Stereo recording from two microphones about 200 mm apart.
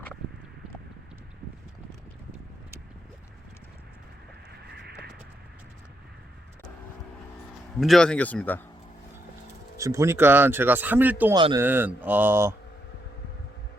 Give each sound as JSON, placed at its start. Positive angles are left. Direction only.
{"t": 7.8, "sound": "speech", "side_deg": 0}
{"t": 9.7, "sound": "speech", "side_deg": -15}
{"t": 11.3, "sound": "a man's voice", "side_deg": -25}
{"t": 11.6, "sound": "speech", "side_deg": -10}